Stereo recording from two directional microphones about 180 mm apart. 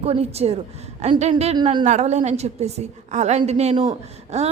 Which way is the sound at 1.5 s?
25° right (ahead or behind).